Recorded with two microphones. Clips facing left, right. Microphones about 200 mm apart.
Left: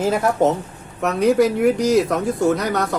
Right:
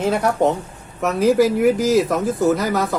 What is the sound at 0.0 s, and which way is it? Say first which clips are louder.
Speech: even; centre (ahead or behind).